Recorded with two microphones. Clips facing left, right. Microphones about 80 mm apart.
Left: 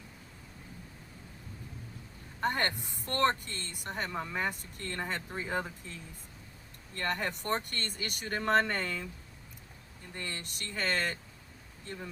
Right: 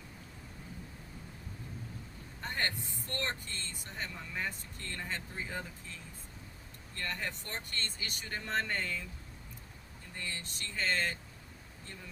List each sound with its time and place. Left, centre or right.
2.4 s speech: left
7.0 s speech: left
10.2 s speech: left